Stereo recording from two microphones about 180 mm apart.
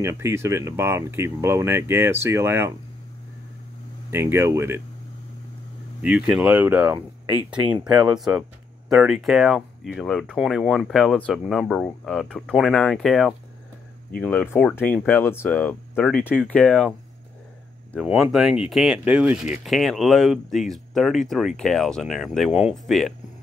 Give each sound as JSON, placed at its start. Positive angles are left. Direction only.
{"t": 0.0, "sound": "speech", "side_deg": -15}
{"t": 4.1, "sound": "speech", "side_deg": -15}
{"t": 5.9, "sound": "speech", "side_deg": -5}
{"t": 7.9, "sound": "speech", "side_deg": -20}
{"t": 8.2, "sound": "speech", "side_deg": -5}
{"t": 18.0, "sound": "speech", "side_deg": 0}